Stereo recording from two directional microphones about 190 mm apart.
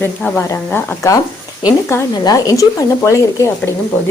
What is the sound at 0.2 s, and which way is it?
A woman's voice, 10° left (ahead or behind).